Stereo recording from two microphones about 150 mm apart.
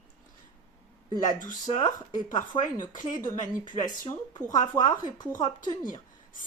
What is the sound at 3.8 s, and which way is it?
Speech, 30° left (ahead or behind).